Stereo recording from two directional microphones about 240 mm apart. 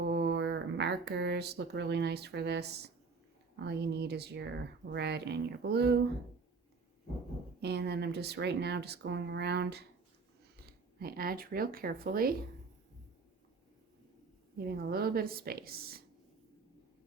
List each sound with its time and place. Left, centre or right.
0.0 s speech: right
7.6 s speech: right
14.6 s a woman's voice: right